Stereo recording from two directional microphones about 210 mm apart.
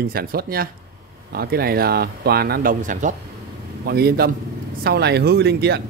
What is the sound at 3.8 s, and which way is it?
Speech, 50° right (ahead or behind).